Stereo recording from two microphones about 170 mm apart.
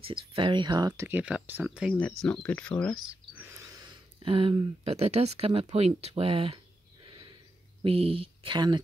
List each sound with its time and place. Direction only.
0.0 s speech: 35° right (ahead or behind); by 2.0 s 5° right (ahead or behind)
2.2 s speech: 10° left (ahead or behind)
3.3 s speech: 15° right (ahead or behind)